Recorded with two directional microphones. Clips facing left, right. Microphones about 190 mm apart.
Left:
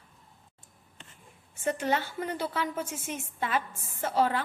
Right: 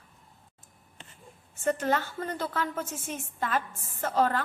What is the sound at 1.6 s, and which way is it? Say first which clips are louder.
A woman's voice: right 2 dB; 10° left (ahead or behind).